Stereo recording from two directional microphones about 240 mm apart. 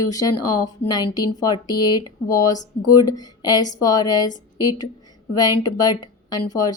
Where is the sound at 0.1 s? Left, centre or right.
Centre.